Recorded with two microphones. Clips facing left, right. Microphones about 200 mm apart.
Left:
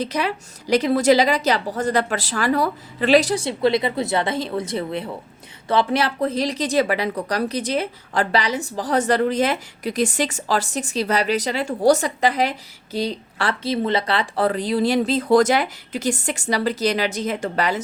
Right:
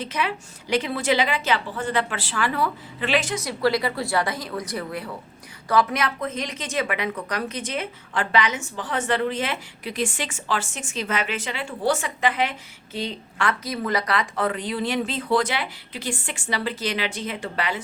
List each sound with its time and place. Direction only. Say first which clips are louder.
0.0 s a woman's voice: left 4 dB; 40° left (ahead or behind)